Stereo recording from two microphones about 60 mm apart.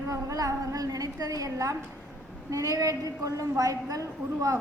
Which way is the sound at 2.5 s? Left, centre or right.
Right.